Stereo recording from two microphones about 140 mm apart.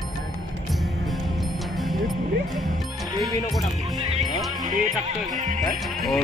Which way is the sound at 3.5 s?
Centre (ahead or behind).